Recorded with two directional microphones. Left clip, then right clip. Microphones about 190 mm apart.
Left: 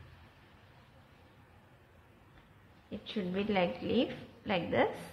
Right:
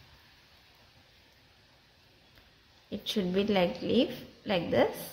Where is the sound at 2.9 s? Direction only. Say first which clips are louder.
Right 6 dB; 25° right (ahead or behind).